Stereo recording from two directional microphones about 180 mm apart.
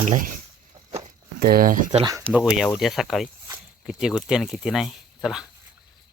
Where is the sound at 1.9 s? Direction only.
20° right (ahead or behind).